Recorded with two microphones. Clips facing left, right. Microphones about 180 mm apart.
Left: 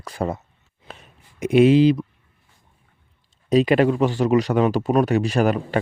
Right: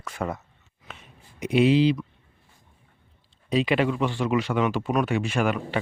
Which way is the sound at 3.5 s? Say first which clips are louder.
Left 6 dB; 45° left (ahead or behind).